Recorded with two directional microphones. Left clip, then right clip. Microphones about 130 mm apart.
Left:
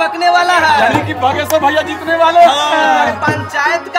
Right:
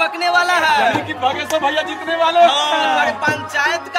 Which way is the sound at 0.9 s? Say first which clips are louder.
Left 5 dB; 20° left (ahead or behind).